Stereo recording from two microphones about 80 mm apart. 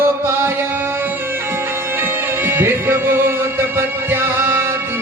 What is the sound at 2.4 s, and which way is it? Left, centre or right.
Music, right.